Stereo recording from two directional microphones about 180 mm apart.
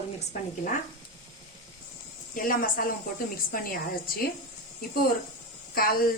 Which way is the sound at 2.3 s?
50° left (ahead or behind).